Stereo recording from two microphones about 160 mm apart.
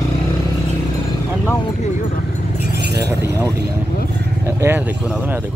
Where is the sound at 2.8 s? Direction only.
90° right.